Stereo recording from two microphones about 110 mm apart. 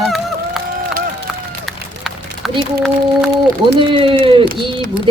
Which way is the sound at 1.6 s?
Centre (ahead or behind).